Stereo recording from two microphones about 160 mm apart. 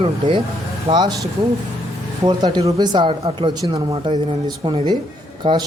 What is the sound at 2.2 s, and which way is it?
A man's voice, 25° right (ahead or behind).